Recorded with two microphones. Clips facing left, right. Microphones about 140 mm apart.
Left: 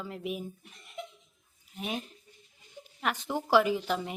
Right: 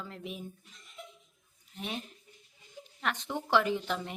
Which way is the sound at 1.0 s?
70° left (ahead or behind).